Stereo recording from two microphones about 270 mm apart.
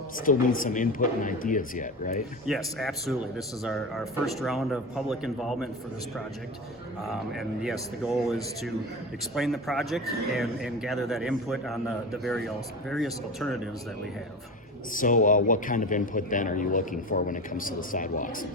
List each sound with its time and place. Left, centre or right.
0.3 s a man's voice: left
2.5 s a man's voice: centre
7.1 s a man's voice: centre
14.9 s a man's voice: left